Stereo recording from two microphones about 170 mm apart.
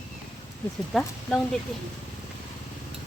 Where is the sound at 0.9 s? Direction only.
5° left (ahead or behind).